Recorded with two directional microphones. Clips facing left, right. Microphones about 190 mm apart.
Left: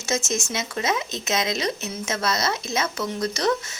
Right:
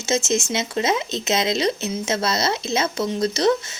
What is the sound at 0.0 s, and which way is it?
Speech, 20° right (ahead or behind).